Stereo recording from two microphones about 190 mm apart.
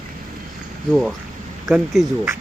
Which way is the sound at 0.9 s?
Centre (ahead or behind).